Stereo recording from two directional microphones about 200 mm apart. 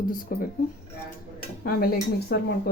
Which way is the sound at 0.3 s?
45° left (ahead or behind).